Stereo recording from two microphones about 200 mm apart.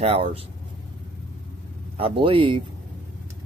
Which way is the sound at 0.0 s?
30° right (ahead or behind).